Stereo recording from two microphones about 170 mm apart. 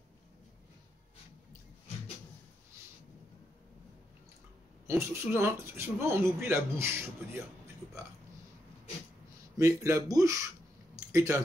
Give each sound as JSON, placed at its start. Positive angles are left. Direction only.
{"t": 4.8, "sound": "speech", "side_deg": -15}
{"t": 9.6, "sound": "speech", "side_deg": -20}